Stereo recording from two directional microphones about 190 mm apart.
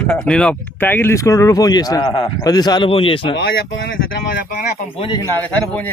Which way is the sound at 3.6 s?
80° left.